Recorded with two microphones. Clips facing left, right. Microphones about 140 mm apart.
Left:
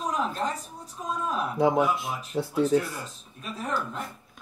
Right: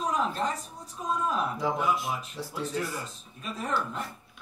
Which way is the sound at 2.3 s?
60° left (ahead or behind).